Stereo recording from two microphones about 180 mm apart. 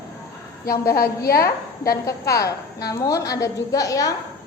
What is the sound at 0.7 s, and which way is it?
Speech, 60° left (ahead or behind).